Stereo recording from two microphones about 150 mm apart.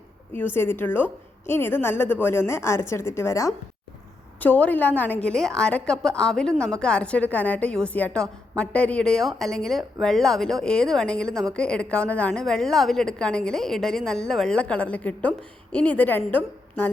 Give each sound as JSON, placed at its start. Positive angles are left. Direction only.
{"t": 0.3, "sound": "a woman's voice", "side_deg": 15}